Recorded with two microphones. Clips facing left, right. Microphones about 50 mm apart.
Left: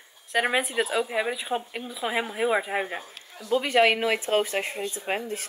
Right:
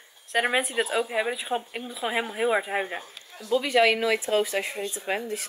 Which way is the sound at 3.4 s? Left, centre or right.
Left.